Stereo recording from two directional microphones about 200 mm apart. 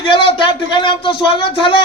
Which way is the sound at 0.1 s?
25° left (ahead or behind).